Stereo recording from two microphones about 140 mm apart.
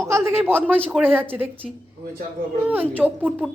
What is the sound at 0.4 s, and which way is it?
Speech, 15° right (ahead or behind).